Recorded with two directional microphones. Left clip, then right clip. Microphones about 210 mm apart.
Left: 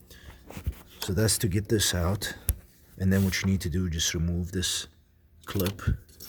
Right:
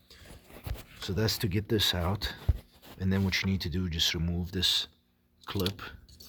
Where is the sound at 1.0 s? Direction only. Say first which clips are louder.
Left 3 dB; 5° left (ahead or behind).